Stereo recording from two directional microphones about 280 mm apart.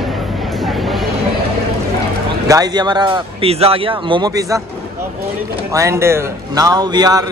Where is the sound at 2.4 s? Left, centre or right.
Centre.